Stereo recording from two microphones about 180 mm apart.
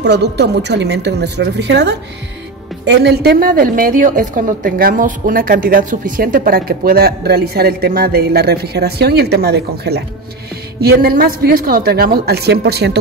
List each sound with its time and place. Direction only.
0.0 s a woman's voice: 70° right (ahead or behind)